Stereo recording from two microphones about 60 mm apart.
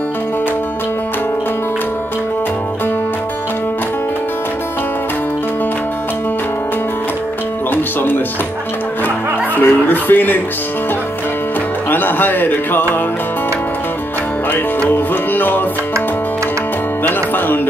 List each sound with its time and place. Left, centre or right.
7.7 s music: left
9.6 s a sound: left
11.9 s speech: left
14.5 s music: left